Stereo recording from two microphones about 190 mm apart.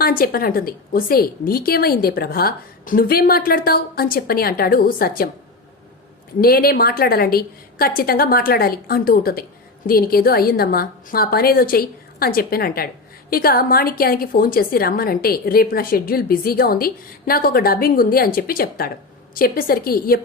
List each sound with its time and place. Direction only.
0.0 s a woman's voice: 50° left (ahead or behind)
6.4 s a woman's voice: 50° left (ahead or behind)